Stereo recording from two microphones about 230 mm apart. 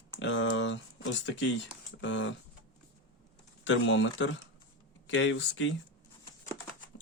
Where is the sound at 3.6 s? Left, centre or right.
Left.